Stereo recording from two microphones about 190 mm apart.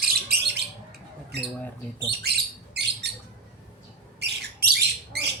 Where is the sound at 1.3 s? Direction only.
60° right (ahead or behind).